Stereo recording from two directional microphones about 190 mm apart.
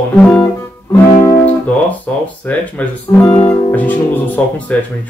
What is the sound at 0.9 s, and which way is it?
Speech, 15° left (ahead or behind).